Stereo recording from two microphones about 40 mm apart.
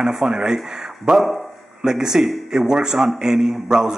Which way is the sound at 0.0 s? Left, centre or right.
Centre.